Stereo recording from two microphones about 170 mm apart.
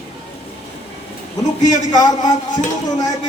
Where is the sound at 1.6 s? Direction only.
25° left (ahead or behind).